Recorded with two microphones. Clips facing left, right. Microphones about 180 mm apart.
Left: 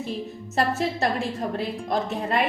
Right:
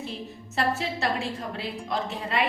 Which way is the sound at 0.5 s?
45° left (ahead or behind).